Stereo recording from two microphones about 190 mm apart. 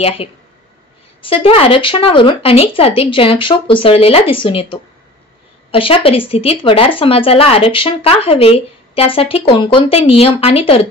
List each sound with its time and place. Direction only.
1.2 s a woman's voice: 30° left (ahead or behind)